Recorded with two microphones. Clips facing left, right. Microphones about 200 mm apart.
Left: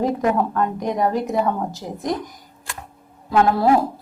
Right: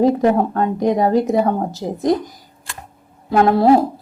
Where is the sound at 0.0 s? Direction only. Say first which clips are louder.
Right 5 dB; 30° right (ahead or behind).